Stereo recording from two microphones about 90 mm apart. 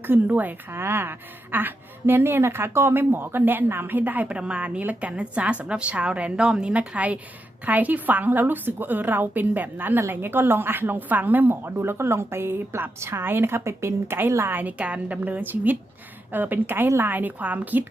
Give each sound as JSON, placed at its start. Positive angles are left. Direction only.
{"t": 0.1, "sound": "a woman's voice", "side_deg": -20}